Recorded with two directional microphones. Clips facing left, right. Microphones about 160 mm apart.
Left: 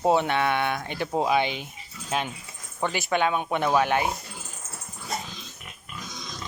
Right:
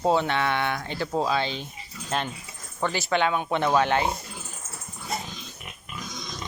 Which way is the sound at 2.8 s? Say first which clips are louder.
Even; 15° left (ahead or behind).